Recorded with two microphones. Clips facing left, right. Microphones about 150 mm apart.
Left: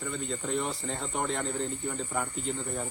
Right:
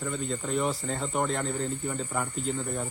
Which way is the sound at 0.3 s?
Centre (ahead or behind).